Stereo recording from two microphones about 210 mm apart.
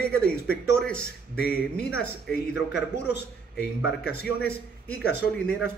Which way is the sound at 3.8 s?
50° left (ahead or behind).